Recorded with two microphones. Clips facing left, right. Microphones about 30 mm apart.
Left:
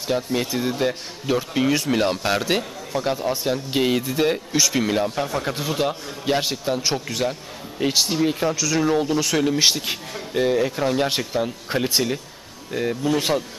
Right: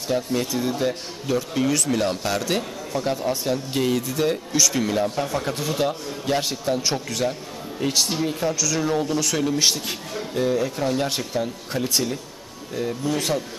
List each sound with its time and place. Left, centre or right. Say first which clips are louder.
0.1 s speech: left 1 dB; centre
3.8 s speech: left 2 dB; left